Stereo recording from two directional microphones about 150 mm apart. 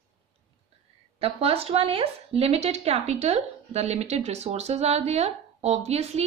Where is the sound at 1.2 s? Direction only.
40° right (ahead or behind).